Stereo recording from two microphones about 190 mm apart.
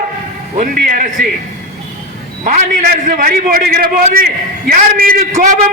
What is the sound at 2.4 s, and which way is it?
A man's voice, 45° right (ahead or behind).